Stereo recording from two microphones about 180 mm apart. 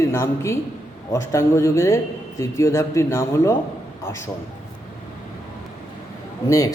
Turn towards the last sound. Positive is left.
turn(degrees=20)  # may be behind; listen again after turning